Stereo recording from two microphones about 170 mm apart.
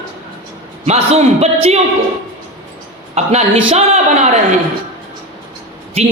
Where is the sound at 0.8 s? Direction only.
40° right (ahead or behind).